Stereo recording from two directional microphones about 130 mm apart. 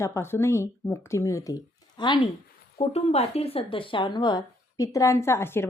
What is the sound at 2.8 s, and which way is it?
A woman's voice, 50° left (ahead or behind).